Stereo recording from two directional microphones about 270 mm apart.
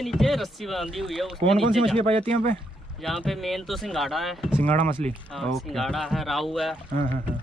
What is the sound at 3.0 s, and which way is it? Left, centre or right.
Speech, centre.